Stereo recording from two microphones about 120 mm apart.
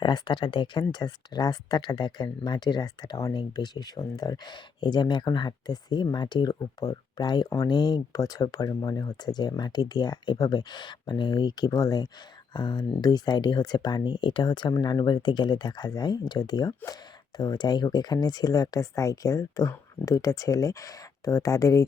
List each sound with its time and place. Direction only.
0.0 s speech: 40° left (ahead or behind)